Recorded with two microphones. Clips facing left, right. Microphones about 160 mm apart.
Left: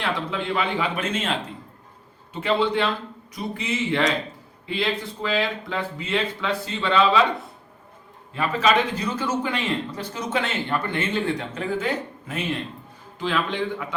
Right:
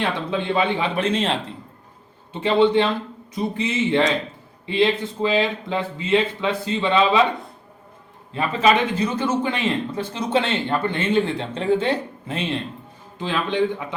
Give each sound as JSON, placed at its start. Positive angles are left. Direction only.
{"t": 0.0, "sound": "speech", "side_deg": -25}
{"t": 2.4, "sound": "speech", "side_deg": -25}
{"t": 8.3, "sound": "speech", "side_deg": -20}